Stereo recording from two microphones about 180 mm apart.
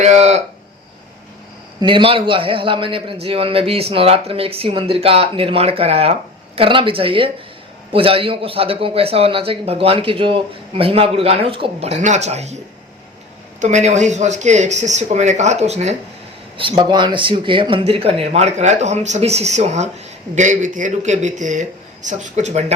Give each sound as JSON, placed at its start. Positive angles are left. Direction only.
{"t": 0.0, "sound": "a man's voice", "side_deg": -40}
{"t": 1.8, "sound": "a man's voice", "side_deg": -25}
{"t": 13.6, "sound": "a man's voice", "side_deg": -40}